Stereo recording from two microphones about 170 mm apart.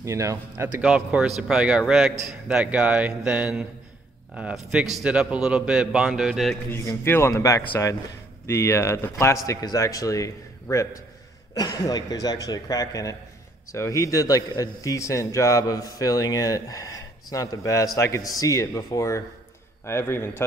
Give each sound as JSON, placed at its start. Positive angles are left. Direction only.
{"t": 0.0, "sound": "speech", "side_deg": -15}
{"t": 6.7, "sound": "a man's voice", "side_deg": 15}